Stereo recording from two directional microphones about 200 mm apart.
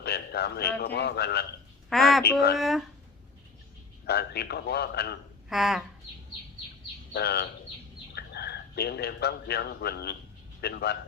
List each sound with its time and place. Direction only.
0.0 s a man's voice: 55° left (ahead or behind)
1.9 s a woman's voice: centre (ahead or behind)
4.0 s a man's voice: 55° left (ahead or behind)
5.5 s a woman's voice: centre (ahead or behind)
7.1 s a man's voice: 55° left (ahead or behind)